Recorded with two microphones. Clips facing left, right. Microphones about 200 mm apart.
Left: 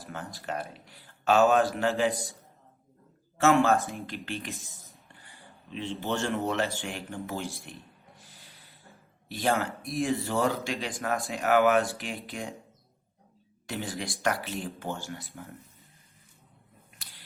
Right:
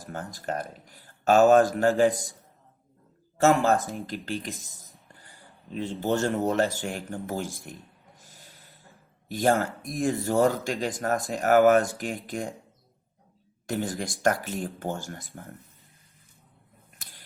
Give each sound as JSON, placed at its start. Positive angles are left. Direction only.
{"t": 0.0, "sound": "speech", "side_deg": -45}
{"t": 3.3, "sound": "speech", "side_deg": -35}
{"t": 13.7, "sound": "speech", "side_deg": -45}
{"t": 17.0, "sound": "a sound", "side_deg": -45}